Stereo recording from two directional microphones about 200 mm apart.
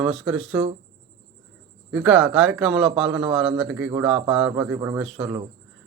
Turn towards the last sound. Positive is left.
turn(degrees=-5)  # may be behind; listen again after turning